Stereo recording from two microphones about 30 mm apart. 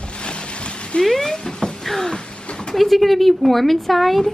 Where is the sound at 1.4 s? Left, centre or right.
Left.